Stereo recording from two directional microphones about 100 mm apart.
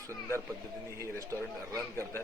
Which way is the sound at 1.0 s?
30° right (ahead or behind).